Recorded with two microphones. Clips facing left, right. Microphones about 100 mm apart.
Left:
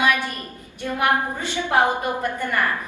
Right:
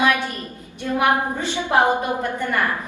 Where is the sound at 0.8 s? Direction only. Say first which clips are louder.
Right 2 dB; 20° right (ahead or behind).